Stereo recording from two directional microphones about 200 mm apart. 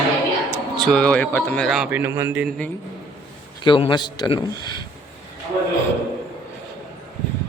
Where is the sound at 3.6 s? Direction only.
25° left (ahead or behind).